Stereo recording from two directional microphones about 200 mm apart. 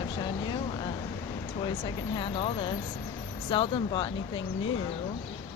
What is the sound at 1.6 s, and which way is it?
Speech, 25° left (ahead or behind).